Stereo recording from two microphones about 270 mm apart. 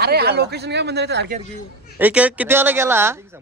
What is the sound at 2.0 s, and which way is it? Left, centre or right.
Speech, centre.